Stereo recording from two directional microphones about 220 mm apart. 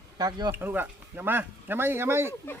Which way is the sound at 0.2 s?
20° right (ahead or behind).